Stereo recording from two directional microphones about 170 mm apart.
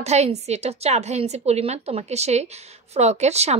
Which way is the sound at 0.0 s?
40° right (ahead or behind).